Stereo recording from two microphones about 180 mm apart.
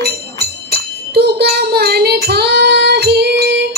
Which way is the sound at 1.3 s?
60° right (ahead or behind).